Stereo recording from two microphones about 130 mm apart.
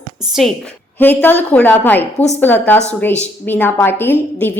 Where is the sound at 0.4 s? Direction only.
Centre (ahead or behind).